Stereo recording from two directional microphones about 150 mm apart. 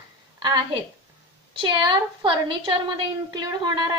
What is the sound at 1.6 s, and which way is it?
A woman's voice, 30° right (ahead or behind).